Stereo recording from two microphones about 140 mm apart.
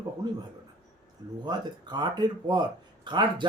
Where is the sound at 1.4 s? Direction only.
30° right (ahead or behind).